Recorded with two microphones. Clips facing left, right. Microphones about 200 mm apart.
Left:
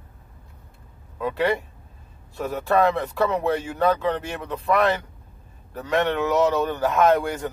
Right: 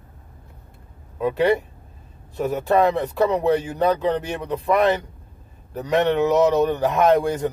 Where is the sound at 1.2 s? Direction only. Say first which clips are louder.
Right 4 dB; 20° right (ahead or behind).